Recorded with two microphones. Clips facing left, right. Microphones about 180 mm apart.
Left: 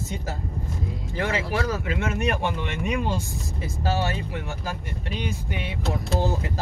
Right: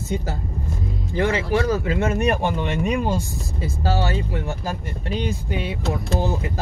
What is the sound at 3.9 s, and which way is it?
Speech, 30° right (ahead or behind).